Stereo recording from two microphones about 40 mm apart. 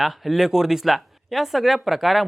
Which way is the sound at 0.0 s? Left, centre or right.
Centre.